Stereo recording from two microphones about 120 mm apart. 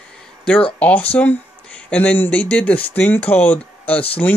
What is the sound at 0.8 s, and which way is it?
Speech, 10° left (ahead or behind).